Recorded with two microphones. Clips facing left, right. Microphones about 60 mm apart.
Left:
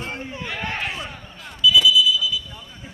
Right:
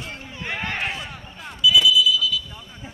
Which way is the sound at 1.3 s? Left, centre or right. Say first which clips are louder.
Left 1 dB; centre.